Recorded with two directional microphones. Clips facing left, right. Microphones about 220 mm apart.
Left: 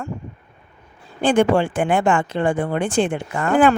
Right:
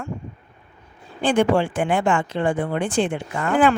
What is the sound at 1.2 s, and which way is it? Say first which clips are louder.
Speech: left 2 dB; 50° left (ahead or behind).